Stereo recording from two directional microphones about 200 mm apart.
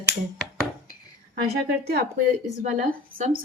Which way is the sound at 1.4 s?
50° right (ahead or behind).